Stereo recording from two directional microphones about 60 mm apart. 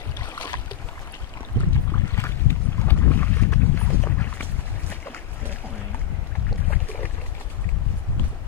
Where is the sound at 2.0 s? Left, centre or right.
Left.